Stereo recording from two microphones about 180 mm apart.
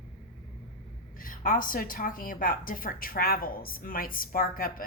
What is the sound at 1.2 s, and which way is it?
A woman's voice, 50° left (ahead or behind).